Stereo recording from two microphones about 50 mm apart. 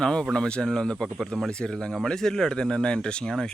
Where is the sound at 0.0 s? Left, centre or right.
Centre.